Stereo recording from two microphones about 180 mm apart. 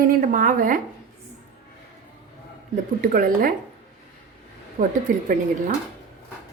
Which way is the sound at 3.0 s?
50° right (ahead or behind).